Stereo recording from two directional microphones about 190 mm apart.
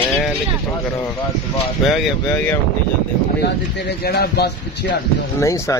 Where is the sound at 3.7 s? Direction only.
55° left (ahead or behind).